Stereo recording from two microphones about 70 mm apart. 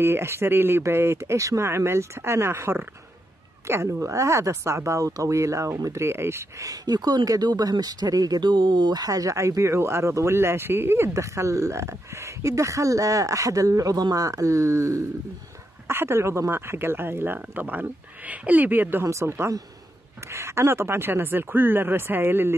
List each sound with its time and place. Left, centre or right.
0.0 s speech: right
6.6 s speech: right
15.9 s speech: right
19.0 s speech: right